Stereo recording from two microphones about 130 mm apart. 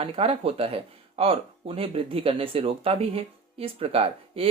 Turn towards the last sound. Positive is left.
turn(degrees=-45)  # may be behind; listen again after turning